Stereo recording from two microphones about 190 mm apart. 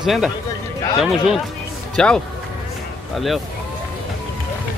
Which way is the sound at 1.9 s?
5° left (ahead or behind).